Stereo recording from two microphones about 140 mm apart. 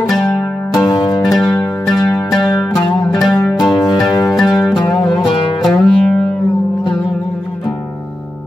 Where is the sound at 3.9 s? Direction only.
25° left (ahead or behind).